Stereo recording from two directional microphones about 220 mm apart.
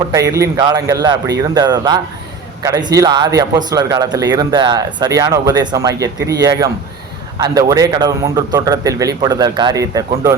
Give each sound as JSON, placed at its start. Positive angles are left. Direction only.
{"t": 0.1, "sound": "a man's voice", "side_deg": -15}